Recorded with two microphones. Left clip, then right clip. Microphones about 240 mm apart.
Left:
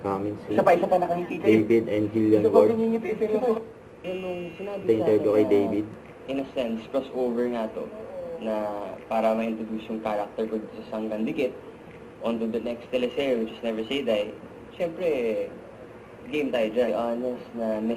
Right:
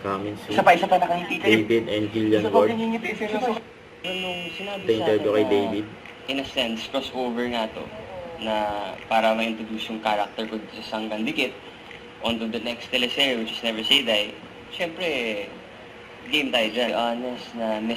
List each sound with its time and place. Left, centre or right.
0.0 s a man's voice: right